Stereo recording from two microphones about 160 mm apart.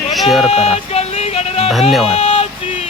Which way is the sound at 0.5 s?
40° left (ahead or behind).